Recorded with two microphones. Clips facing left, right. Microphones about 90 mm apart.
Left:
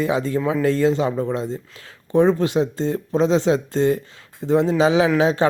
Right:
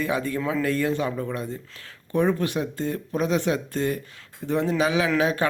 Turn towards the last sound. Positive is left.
turn(degrees=20)  # may be behind; listen again after turning